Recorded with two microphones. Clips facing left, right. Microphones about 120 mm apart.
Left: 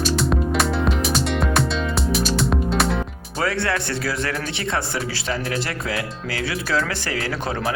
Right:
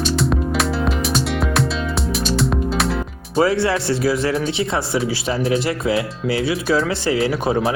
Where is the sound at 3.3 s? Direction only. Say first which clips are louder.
Right 7 dB; 25° right (ahead or behind).